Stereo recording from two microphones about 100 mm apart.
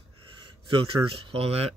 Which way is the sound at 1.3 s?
90° right.